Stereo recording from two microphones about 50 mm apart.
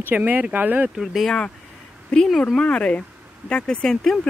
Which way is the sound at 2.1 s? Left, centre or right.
Centre.